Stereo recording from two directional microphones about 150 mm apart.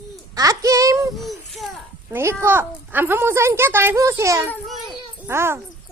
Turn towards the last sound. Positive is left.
turn(degrees=-15)  # may be behind; listen again after turning